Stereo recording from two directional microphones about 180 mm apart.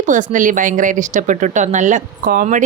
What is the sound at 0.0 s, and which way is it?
Speech, 45° right (ahead or behind).